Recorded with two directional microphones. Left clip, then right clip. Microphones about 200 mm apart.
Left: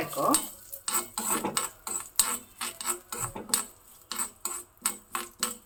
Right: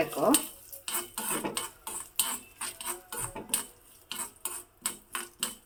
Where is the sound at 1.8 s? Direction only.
5° left (ahead or behind).